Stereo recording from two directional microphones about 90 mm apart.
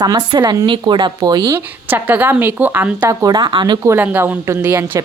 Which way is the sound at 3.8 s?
20° right (ahead or behind).